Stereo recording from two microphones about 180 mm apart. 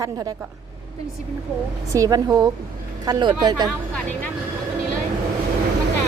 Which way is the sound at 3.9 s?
10° left (ahead or behind).